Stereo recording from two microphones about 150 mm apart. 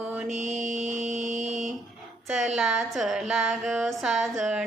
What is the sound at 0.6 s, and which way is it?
Music, 55° right (ahead or behind).